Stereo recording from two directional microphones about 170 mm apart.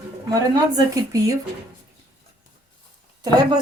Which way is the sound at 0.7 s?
20° right (ahead or behind).